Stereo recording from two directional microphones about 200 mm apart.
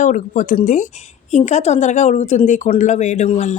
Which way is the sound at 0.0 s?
40° left (ahead or behind).